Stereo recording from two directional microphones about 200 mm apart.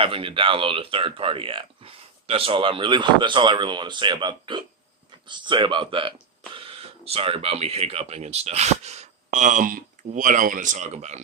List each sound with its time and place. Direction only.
0.0 s speech: 25° right (ahead or behind)